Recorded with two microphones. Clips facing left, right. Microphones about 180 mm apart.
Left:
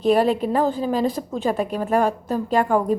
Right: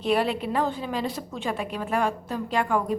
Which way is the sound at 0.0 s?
40° left (ahead or behind).